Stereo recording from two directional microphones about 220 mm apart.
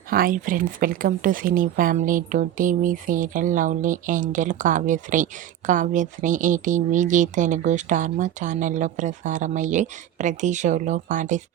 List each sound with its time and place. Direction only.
0.1 s speech: 40° right (ahead or behind)